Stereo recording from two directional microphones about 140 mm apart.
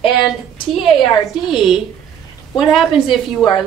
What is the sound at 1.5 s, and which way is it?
Speech, centre (ahead or behind).